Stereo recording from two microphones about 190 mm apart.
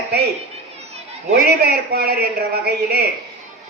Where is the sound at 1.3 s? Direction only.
55° right (ahead or behind).